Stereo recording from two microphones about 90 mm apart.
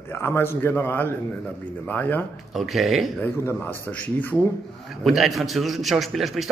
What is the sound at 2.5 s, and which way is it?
Speech, centre (ahead or behind).